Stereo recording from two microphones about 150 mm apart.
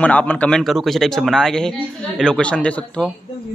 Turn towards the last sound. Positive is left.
turn(degrees=5)  # may be behind; listen again after turning